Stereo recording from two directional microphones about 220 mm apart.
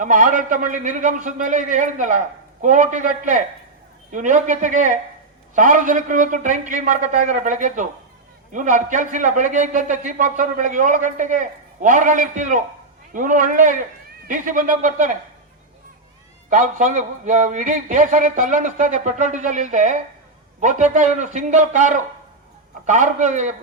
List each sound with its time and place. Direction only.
0.0 s a man's voice: 35° right (ahead or behind)
16.5 s a man's voice: 35° right (ahead or behind)